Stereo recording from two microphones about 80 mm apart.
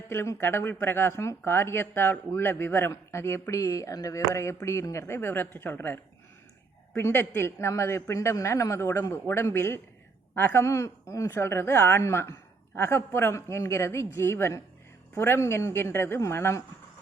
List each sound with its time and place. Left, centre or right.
0.1 s a woman's voice: left
10.6 s speech: left